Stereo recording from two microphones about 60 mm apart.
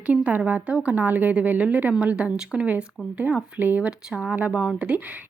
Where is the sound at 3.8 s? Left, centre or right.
Centre.